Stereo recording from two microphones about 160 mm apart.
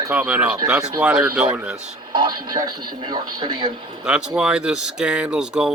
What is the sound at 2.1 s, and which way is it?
Speech, 25° right (ahead or behind).